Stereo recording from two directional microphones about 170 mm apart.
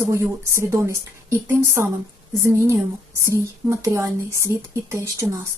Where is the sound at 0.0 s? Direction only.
15° right (ahead or behind).